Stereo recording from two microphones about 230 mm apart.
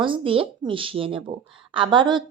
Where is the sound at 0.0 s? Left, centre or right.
Right.